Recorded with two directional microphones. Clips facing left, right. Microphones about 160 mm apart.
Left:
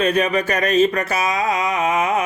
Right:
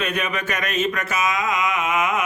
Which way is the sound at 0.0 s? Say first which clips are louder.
Left 7 dB; 35° left (ahead or behind).